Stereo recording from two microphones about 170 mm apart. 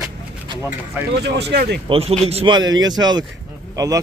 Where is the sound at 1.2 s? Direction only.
75° right (ahead or behind).